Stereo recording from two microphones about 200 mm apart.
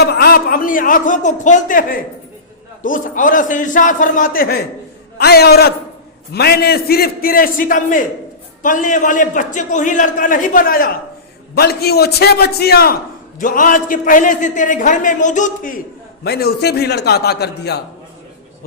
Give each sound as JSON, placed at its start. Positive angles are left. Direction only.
{"t": 0.0, "sound": "a man's voice", "side_deg": 55}
{"t": 16.2, "sound": "a man's voice", "side_deg": 50}